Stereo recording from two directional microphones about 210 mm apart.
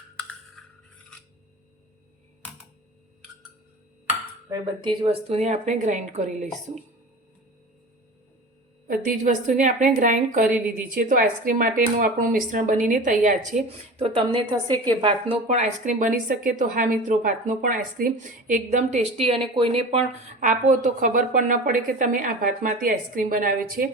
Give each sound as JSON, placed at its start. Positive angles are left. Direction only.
{"t": 4.4, "sound": "speech", "side_deg": -20}
{"t": 9.0, "sound": "speech", "side_deg": -35}
{"t": 13.7, "sound": "a woman's voice", "side_deg": -25}